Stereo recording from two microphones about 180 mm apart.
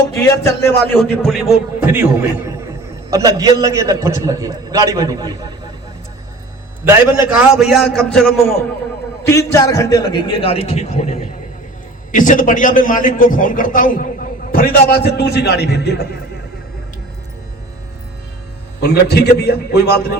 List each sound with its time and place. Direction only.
0.2 s speech: 15° left (ahead or behind)
1.1 s a man's voice: 5° left (ahead or behind); by 5.5 s 20° right (ahead or behind)
6.8 s a man's voice: 5° right (ahead or behind)
9.2 s a man's voice: 15° left (ahead or behind); by 16.0 s 65° left (ahead or behind)
18.8 s a man's voice: 65° left (ahead or behind)